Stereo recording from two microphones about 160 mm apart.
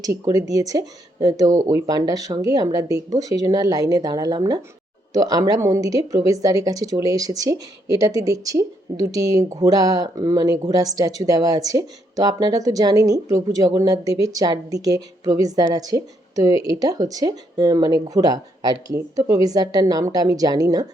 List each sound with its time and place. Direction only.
0.0 s speech: 20° right (ahead or behind)